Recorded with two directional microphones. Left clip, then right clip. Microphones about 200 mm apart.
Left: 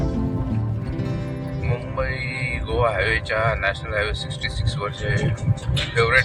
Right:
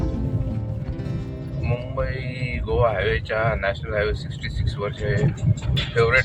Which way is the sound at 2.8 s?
10° right (ahead or behind).